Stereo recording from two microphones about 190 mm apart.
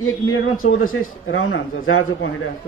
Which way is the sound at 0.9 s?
90° left.